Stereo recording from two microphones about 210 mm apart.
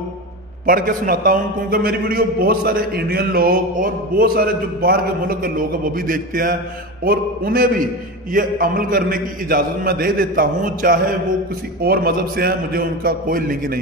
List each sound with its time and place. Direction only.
0.7 s a man's voice: 40° right (ahead or behind)